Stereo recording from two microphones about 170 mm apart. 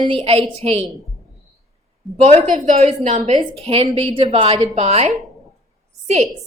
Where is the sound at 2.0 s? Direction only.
Centre (ahead or behind).